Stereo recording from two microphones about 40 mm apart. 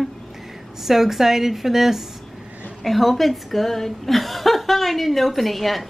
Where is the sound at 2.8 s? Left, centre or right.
Centre.